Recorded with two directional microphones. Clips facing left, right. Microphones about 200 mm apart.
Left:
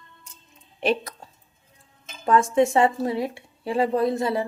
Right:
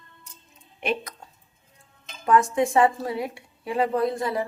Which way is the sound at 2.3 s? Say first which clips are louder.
Left 2 dB; 25° left (ahead or behind).